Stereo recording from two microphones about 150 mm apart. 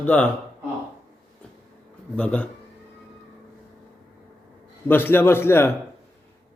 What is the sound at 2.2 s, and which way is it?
Speech, 10° left (ahead or behind).